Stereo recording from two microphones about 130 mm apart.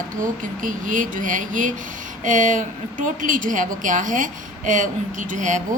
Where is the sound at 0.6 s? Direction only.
90° right.